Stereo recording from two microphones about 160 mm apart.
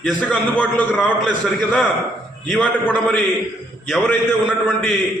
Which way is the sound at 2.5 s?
10° left (ahead or behind).